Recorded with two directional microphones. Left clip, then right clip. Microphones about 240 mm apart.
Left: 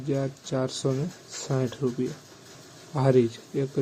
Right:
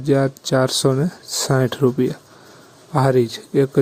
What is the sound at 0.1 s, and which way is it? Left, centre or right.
Speech, right.